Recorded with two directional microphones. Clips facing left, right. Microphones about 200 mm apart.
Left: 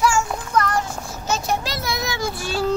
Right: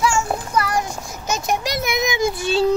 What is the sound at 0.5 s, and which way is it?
A child's voice, 10° right (ahead or behind).